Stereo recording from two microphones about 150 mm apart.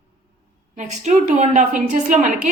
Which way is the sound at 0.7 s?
50° right (ahead or behind).